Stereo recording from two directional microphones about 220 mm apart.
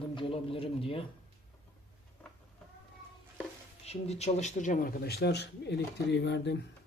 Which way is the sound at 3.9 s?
30° left (ahead or behind).